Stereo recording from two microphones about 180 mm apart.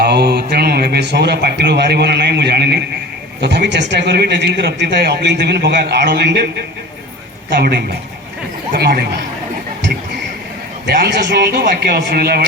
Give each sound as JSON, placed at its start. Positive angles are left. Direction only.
{"t": 0.0, "sound": "a man's voice", "side_deg": -65}
{"t": 7.5, "sound": "a man's voice", "side_deg": -65}
{"t": 10.8, "sound": "a man's voice", "side_deg": -65}